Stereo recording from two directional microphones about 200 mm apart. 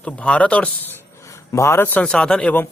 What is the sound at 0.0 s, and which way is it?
Speech, 5° left (ahead or behind).